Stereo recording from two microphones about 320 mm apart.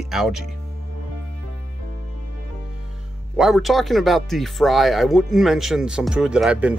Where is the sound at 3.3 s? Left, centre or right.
Centre.